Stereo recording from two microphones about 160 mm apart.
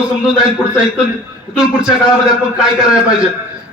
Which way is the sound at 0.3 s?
5° right (ahead or behind).